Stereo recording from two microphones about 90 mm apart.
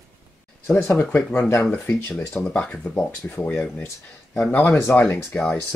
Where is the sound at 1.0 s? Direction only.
15° left (ahead or behind).